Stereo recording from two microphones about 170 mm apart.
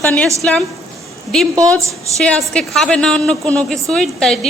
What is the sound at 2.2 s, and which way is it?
A woman's voice, 5° left (ahead or behind).